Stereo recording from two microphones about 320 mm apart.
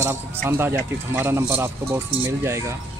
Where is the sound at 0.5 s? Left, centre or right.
Centre.